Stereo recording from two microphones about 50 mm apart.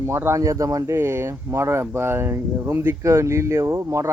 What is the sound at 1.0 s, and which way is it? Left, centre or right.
Speech, right.